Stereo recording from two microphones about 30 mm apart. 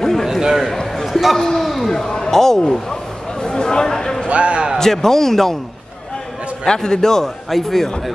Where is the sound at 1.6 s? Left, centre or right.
Centre.